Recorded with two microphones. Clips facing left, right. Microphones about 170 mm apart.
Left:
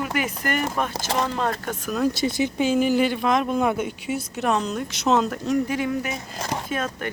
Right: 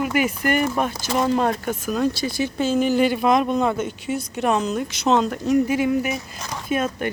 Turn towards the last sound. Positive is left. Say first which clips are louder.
# right 4 dB
turn(degrees=-15)  # may be behind; listen again after turning